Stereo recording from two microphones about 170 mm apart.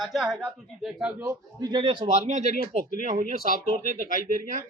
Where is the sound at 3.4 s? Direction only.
60° left (ahead or behind).